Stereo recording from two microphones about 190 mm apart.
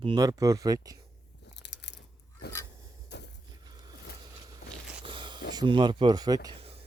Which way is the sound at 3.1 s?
60° left (ahead or behind).